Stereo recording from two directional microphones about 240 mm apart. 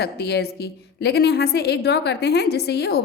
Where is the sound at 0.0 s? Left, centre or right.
Left.